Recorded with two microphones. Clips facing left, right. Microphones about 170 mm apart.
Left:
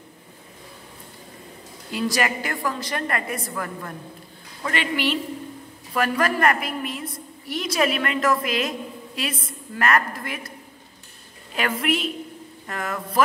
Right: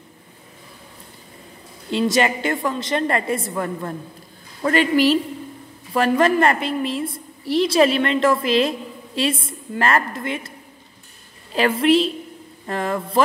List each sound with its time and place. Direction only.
1.9 s a woman's voice: 25° right (ahead or behind)
4.6 s a woman's voice: 40° right (ahead or behind)
5.9 s a woman's voice: 25° right (ahead or behind)
11.5 s a woman's voice: 30° right (ahead or behind)